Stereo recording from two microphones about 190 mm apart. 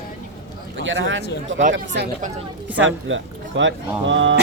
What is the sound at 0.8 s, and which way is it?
A man's voice, 80° right.